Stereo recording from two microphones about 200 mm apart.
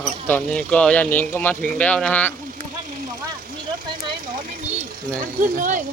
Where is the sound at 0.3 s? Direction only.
5° left (ahead or behind).